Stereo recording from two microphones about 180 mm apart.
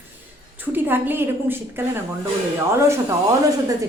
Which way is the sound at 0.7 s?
10° right (ahead or behind).